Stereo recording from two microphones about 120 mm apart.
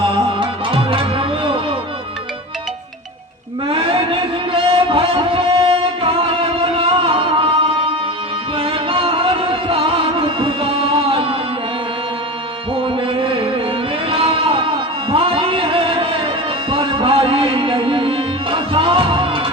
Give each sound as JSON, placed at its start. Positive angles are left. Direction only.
{"t": 0.3, "sound": "music", "side_deg": -45}
{"t": 3.7, "sound": "a sound", "side_deg": -50}
{"t": 8.5, "sound": "music", "side_deg": -50}
{"t": 12.7, "sound": "music", "side_deg": -45}